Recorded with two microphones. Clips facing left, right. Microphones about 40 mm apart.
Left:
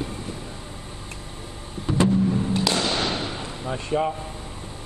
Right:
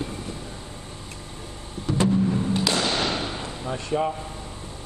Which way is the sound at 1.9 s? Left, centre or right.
Left.